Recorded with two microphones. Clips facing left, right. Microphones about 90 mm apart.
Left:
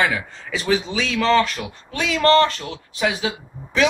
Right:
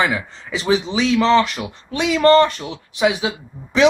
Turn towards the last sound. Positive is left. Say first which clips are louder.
# right 3 dB
turn(degrees=-20)  # may be behind; listen again after turning